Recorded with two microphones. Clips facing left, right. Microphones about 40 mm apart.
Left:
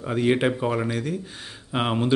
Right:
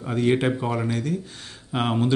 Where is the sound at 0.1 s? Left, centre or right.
Centre.